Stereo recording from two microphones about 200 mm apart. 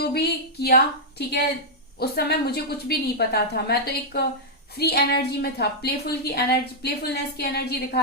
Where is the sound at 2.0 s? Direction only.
50° left (ahead or behind).